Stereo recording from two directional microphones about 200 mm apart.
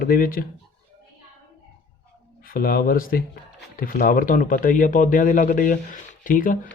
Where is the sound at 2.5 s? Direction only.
45° left (ahead or behind).